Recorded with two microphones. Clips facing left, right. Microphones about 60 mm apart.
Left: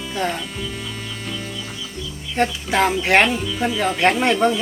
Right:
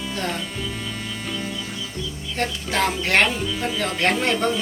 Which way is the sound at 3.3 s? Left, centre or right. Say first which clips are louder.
Left 3 dB; centre.